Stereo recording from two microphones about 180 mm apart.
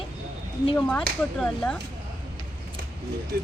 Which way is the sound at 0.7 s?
10° left (ahead or behind).